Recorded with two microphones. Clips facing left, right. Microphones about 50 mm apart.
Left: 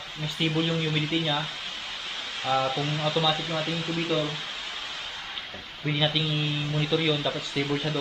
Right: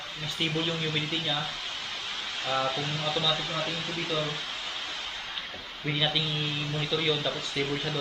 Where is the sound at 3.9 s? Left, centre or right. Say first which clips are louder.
Left 5 dB; centre.